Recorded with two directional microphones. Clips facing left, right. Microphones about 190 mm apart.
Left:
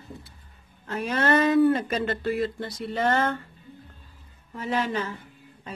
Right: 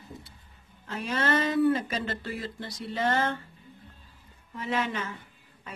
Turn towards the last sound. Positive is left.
turn(degrees=35)  # may be behind; listen again after turning